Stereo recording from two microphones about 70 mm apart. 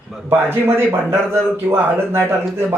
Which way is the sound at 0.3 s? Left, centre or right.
Right.